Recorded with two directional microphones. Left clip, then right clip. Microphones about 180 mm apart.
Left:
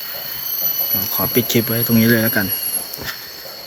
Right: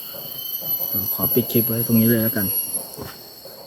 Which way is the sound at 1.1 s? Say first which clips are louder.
Left 4 dB; centre (ahead or behind).